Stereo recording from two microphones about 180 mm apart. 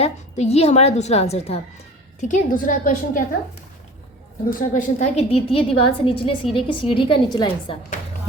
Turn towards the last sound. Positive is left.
turn(degrees=25)  # may be behind; listen again after turning